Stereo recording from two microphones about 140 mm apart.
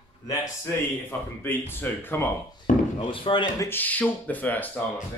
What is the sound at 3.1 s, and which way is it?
Speech, 40° left (ahead or behind).